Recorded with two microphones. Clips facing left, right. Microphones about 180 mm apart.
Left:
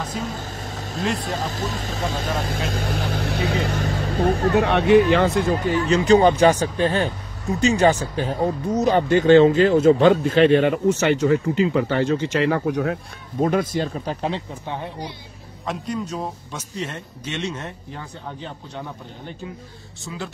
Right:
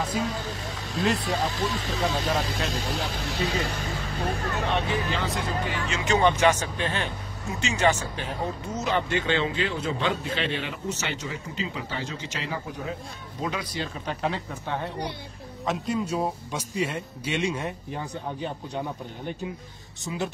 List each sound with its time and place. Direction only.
0.1 s music: 45° left (ahead or behind)
1.2 s speech: 45° left (ahead or behind)
15.6 s speech: centre (ahead or behind)